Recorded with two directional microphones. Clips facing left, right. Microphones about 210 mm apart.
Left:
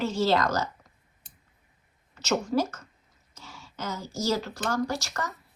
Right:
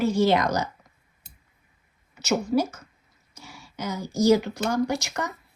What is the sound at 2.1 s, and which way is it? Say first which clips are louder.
Speech: right 3 dB; 10° right (ahead or behind).